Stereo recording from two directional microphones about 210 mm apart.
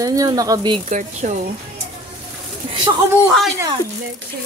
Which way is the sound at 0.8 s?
35° right (ahead or behind).